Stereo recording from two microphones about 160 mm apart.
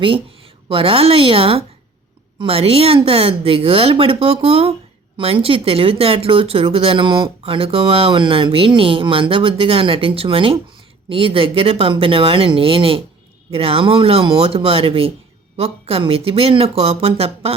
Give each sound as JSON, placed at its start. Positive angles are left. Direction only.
{"t": 0.0, "sound": "a woman's voice", "side_deg": -35}